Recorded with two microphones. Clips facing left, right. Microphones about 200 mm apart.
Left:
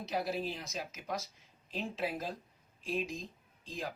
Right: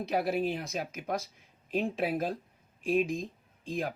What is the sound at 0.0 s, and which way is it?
Speech, 55° right (ahead or behind).